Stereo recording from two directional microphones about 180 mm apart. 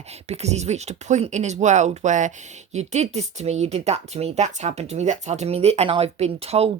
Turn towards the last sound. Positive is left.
turn(degrees=-35)  # may be behind; listen again after turning